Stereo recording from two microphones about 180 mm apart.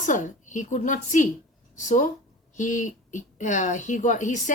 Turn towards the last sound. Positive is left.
turn(degrees=45)  # may be behind; listen again after turning